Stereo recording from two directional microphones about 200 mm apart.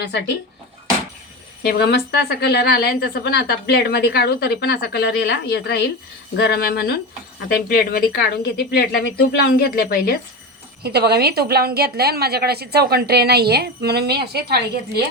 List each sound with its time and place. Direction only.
0.0 s a woman's voice: 60° left (ahead or behind)
1.6 s a woman's voice: 55° left (ahead or behind)
10.8 s a woman's voice: 55° right (ahead or behind)